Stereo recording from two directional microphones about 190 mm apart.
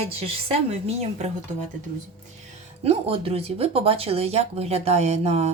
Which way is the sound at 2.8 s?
30° right (ahead or behind).